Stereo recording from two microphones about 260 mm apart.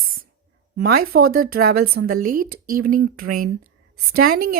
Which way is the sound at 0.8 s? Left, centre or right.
Right.